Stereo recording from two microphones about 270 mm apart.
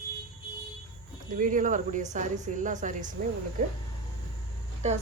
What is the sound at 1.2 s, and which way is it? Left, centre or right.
Speech, right.